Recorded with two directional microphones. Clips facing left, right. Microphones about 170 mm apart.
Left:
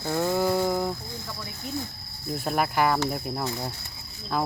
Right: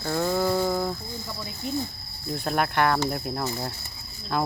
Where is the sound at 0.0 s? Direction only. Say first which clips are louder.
Even; 10° left (ahead or behind).